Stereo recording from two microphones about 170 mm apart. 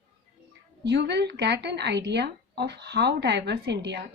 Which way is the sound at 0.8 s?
85° right.